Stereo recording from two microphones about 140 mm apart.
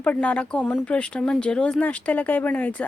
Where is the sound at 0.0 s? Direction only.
10° left (ahead or behind).